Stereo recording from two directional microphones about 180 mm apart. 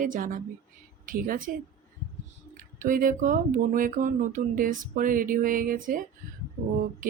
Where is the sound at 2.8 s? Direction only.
50° right (ahead or behind).